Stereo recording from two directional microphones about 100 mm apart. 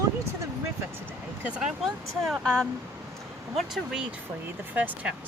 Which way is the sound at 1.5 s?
10° right (ahead or behind).